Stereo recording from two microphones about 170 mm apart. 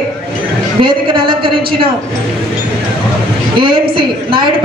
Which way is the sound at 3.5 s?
30° right (ahead or behind).